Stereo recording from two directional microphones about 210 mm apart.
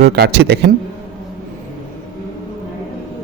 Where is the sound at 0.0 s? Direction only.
50° right (ahead or behind).